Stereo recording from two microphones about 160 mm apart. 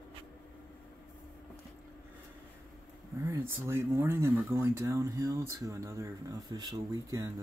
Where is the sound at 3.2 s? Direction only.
15° right (ahead or behind).